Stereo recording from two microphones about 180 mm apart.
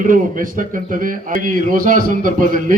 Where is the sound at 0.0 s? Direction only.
50° right (ahead or behind).